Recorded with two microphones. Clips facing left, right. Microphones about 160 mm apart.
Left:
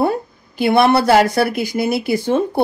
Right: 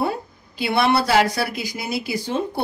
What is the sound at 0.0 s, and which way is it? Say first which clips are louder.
A woman's voice: left 6 dB; 50° left (ahead or behind).